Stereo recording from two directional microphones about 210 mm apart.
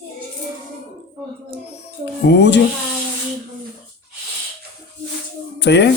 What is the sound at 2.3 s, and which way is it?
Music, 55° left (ahead or behind).